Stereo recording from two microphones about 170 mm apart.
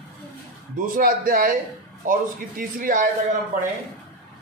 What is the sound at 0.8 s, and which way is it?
A man's voice, 55° right (ahead or behind).